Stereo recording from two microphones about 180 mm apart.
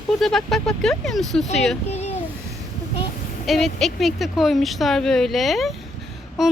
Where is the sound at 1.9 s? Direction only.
35° left (ahead or behind).